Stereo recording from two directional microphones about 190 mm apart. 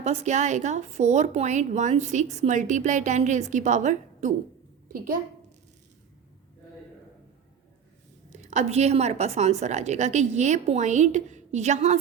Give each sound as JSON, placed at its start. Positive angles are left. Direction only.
{"t": 0.0, "sound": "speech", "side_deg": -35}
{"t": 8.3, "sound": "speech", "side_deg": -40}